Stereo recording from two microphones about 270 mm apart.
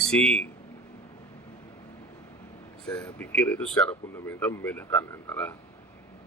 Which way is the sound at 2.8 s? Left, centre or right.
Centre.